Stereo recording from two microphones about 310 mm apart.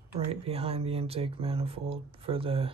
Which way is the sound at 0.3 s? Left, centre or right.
Centre.